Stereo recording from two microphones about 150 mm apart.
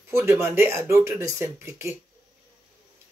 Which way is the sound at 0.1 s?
15° right (ahead or behind).